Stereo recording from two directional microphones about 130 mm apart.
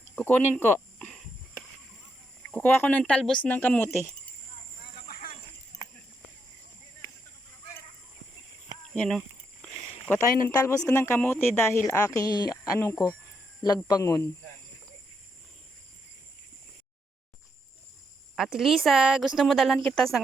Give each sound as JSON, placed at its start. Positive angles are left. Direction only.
{"t": 0.3, "sound": "speech", "side_deg": 15}
{"t": 0.9, "sound": "a sound", "side_deg": 5}
{"t": 2.5, "sound": "speech", "side_deg": 15}
{"t": 9.0, "sound": "a sound", "side_deg": 5}
{"t": 10.1, "sound": "speech", "side_deg": 25}
{"t": 18.3, "sound": "a woman's voice", "side_deg": -5}